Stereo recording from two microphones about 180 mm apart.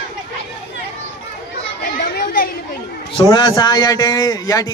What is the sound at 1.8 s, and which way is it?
Children playing, 55° left (ahead or behind).